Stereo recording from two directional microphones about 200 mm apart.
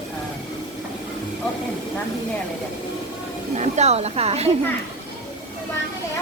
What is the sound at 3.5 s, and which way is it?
Speech, 35° right (ahead or behind).